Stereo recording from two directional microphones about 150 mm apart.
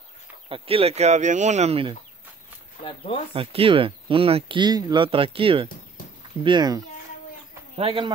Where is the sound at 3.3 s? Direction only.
40° right (ahead or behind).